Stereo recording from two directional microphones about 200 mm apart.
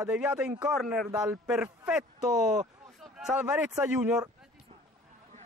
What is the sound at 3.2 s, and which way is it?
Speech, 5° right (ahead or behind).